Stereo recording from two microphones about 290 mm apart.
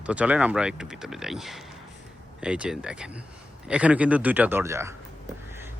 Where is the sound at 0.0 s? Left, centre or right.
Centre.